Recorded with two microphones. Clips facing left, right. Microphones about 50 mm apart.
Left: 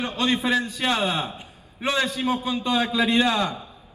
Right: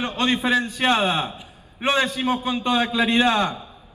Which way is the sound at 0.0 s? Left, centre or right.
Right.